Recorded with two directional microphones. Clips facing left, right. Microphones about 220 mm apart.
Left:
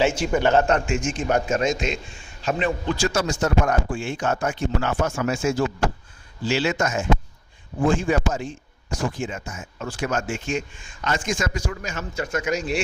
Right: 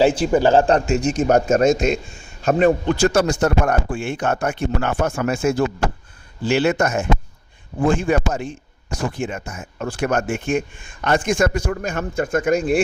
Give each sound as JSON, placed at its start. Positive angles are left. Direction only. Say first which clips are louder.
{"t": 0.0, "sound": "a man's voice", "louder": "right 5 dB", "side_deg": -35}